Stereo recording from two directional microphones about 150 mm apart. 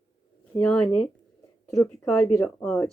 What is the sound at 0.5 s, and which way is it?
Speech, 30° left (ahead or behind).